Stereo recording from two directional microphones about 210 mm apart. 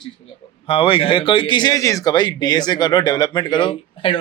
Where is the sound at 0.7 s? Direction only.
25° left (ahead or behind).